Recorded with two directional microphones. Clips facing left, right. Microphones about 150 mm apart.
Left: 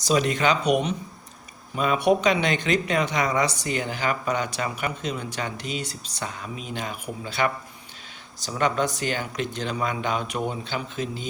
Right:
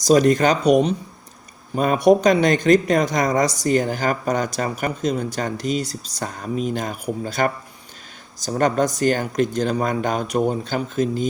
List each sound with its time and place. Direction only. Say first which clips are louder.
0.0 s speech: right 7 dB; 40° right (ahead or behind)